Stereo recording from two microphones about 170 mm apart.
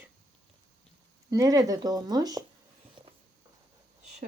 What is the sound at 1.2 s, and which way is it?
Speech, 20° right (ahead or behind).